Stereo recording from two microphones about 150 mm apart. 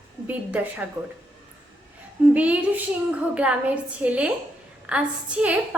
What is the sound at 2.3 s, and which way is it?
A woman's voice, 10° right (ahead or behind).